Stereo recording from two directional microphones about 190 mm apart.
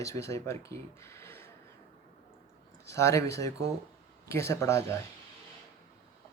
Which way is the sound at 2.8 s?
15° left (ahead or behind).